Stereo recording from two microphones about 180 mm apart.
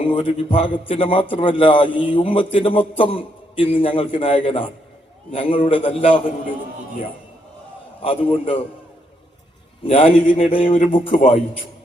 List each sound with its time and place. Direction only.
0.1 s a man's voice: 30° left (ahead or behind)
8.0 s a man's voice: 30° left (ahead or behind)
9.8 s a man's voice: 30° left (ahead or behind)